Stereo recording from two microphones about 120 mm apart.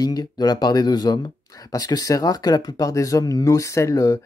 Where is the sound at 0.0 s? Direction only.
30° left (ahead or behind).